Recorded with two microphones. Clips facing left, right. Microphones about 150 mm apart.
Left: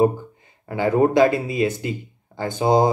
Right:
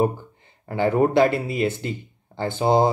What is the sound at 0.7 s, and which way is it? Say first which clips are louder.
Speech: left 1 dB; 20° left (ahead or behind).